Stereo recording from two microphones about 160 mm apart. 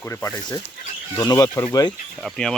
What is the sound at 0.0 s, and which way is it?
Speech, 15° left (ahead or behind).